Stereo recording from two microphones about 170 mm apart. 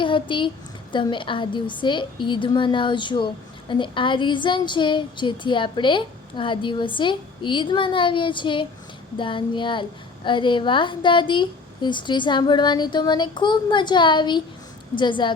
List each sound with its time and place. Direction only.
0.0 s a woman's voice: 30° left (ahead or behind)